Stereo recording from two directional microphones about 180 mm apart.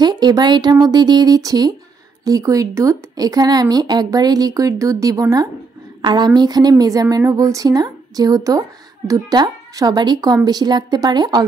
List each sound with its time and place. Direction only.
0.0 s a woman's voice: 25° right (ahead or behind)